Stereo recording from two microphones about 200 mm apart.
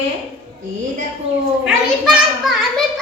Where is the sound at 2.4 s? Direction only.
Centre (ahead or behind).